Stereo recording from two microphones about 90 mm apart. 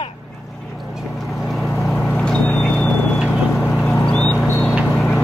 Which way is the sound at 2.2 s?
10° left (ahead or behind).